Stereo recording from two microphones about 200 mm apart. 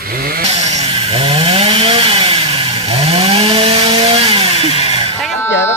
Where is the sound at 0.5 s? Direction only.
30° right (ahead or behind).